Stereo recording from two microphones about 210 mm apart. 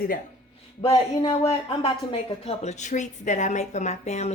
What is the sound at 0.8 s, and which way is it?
Speech, 25° left (ahead or behind).